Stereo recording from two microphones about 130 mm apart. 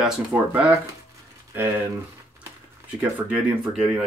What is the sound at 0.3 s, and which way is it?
Speech, 15° right (ahead or behind).